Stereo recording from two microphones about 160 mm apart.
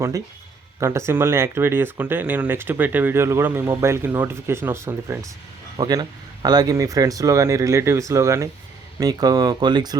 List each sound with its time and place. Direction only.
0.8 s speech: 15° right (ahead or behind)
5.7 s speech: 25° right (ahead or behind)